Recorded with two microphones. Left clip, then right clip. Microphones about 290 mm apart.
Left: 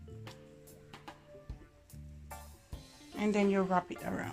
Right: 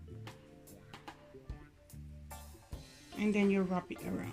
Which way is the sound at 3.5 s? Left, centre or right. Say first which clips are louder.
Left 4 dB; left.